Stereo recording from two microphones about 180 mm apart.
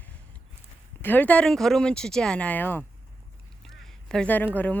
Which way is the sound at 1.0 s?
10° left (ahead or behind).